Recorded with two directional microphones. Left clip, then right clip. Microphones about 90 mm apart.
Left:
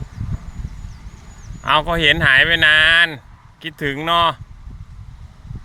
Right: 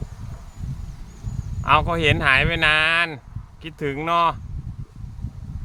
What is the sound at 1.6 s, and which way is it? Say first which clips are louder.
Speech: left 3 dB; 25° left (ahead or behind).